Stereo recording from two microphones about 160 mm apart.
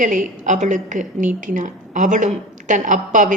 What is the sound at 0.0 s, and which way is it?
A woman's voice, 50° right (ahead or behind).